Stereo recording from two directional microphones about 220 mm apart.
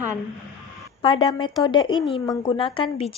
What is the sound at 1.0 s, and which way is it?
Speech, 20° left (ahead or behind).